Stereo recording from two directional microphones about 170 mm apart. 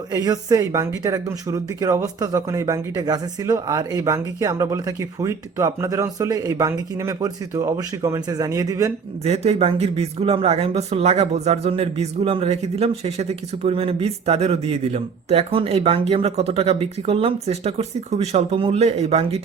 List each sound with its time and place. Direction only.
0.1 s speech: 20° right (ahead or behind)
9.2 s speech: 40° right (ahead or behind)